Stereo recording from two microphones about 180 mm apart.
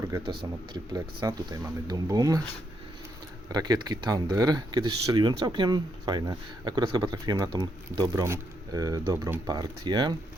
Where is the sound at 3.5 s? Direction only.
20° right (ahead or behind).